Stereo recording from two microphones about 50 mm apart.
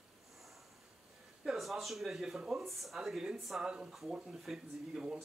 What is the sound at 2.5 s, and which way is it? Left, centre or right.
Speech, centre.